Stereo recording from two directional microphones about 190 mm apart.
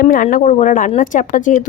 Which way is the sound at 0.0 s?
45° left (ahead or behind).